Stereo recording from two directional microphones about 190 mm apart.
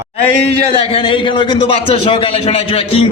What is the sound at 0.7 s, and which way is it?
A man's voice, 25° left (ahead or behind).